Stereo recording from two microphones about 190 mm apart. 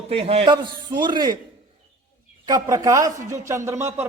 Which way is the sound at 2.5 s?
20° right (ahead or behind).